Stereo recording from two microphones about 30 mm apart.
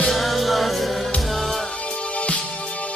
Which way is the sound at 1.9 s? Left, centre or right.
Left.